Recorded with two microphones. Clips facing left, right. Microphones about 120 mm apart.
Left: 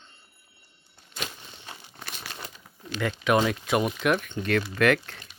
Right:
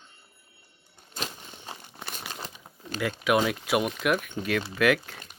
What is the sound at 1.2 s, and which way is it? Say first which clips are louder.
Crumpling: right 1 dB; 40° right (ahead or behind).